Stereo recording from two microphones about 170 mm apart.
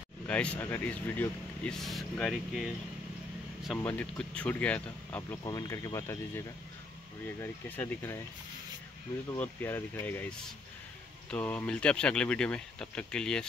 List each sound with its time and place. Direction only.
0.3 s speech: 10° left (ahead or behind)
5.4 s speech: 20° left (ahead or behind)
9.4 s speech: 10° left (ahead or behind)